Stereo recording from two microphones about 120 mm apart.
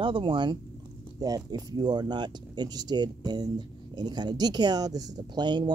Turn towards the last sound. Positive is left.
turn(degrees=-40)  # may be behind; listen again after turning